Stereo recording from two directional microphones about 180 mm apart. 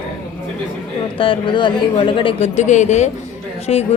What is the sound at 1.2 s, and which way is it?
Speech, 30° left (ahead or behind).